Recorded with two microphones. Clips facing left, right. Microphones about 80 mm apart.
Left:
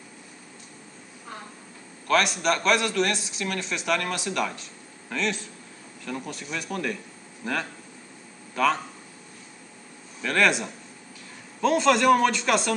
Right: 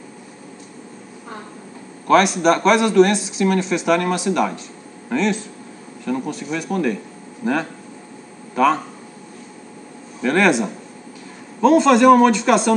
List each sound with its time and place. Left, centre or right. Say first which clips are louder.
2.0 s speech: right 9 dB; centre
10.2 s speech: right 7 dB; centre